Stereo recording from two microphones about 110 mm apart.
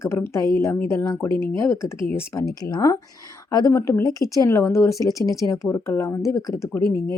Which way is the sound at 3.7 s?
25° left (ahead or behind).